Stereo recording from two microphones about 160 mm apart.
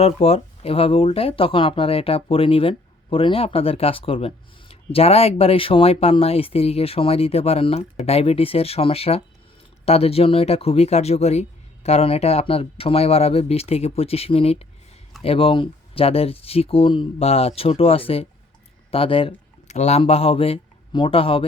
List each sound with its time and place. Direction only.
0.0 s speech: 40° left (ahead or behind)